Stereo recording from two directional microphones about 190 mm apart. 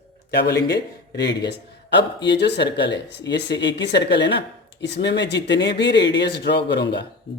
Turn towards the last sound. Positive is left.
turn(degrees=65)  # may be behind; listen again after turning